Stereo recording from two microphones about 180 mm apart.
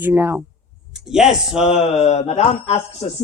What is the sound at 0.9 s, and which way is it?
Speech, 5° right (ahead or behind).